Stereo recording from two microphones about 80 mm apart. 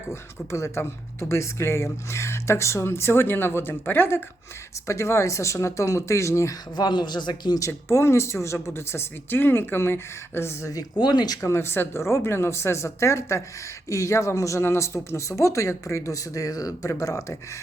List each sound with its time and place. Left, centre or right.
0.1 s speech: left
4.9 s speech: left
6.7 s a man's voice: left
7.7 s speech: left
10.9 s speech: left
11.3 s speech: left